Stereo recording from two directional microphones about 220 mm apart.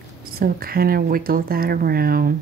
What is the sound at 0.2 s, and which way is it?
Speech, 40° right (ahead or behind).